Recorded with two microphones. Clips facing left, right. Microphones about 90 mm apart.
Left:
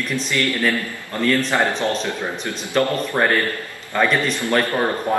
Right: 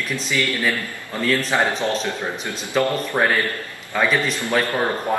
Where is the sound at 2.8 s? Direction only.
5° right (ahead or behind).